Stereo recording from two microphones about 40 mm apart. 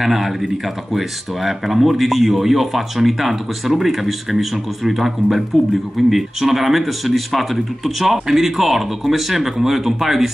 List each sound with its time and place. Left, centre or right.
0.0 s speech: centre